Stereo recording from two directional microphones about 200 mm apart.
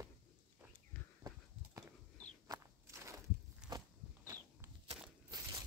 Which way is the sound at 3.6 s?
5° right (ahead or behind).